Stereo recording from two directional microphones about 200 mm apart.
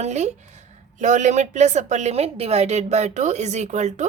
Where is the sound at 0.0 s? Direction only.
35° right (ahead or behind).